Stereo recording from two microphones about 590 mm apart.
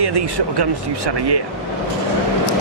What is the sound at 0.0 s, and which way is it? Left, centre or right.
Speech, right.